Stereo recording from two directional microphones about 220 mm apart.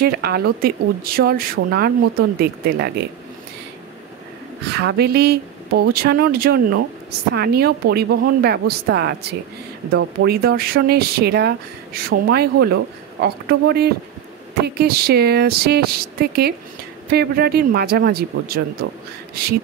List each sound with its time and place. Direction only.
0.0 s speech: 45° right (ahead or behind)
4.6 s speech: 50° right (ahead or behind)
10.2 s speech: 45° right (ahead or behind)